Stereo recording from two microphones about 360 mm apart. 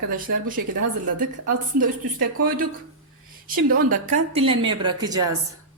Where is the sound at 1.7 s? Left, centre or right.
Right.